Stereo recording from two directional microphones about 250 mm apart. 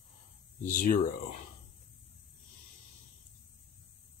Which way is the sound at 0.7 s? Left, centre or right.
Left.